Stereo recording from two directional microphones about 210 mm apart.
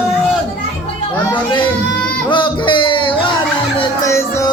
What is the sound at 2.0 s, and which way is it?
Music, 10° left (ahead or behind).